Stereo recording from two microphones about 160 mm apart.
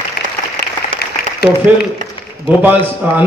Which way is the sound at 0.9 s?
90° left.